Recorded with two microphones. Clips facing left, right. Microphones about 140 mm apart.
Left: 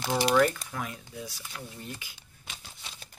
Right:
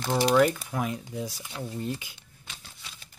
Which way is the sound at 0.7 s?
20° right (ahead or behind).